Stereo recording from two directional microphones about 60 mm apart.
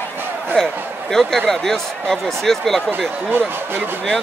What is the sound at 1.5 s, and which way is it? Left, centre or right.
Speech, centre.